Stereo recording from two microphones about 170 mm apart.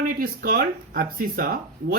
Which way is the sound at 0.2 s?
60° right (ahead or behind).